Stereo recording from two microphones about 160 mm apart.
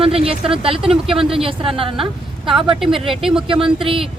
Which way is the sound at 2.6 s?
Centre (ahead or behind).